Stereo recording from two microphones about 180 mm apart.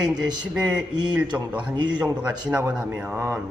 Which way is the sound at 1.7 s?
25° right (ahead or behind).